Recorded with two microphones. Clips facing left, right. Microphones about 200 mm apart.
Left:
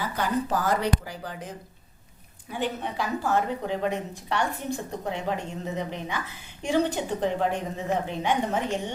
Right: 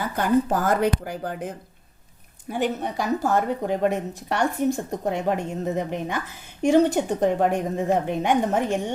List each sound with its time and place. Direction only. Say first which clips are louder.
0.2 s a woman's voice: right 6 dB; 50° right (ahead or behind)